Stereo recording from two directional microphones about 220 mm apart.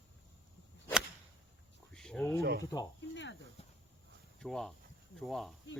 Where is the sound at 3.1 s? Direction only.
55° left (ahead or behind).